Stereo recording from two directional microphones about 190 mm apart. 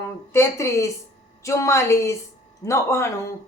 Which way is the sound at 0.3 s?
15° left (ahead or behind).